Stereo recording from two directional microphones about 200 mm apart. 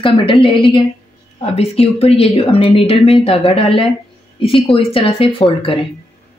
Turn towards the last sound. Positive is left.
turn(degrees=25)  # may be behind; listen again after turning